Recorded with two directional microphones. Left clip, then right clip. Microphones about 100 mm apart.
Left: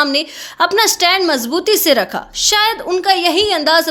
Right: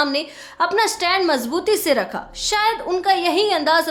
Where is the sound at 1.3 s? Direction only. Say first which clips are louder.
Left 4 dB; 25° left (ahead or behind).